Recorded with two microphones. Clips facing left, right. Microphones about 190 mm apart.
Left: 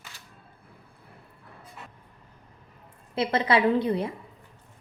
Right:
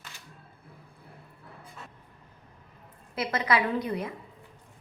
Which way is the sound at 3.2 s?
30° left (ahead or behind).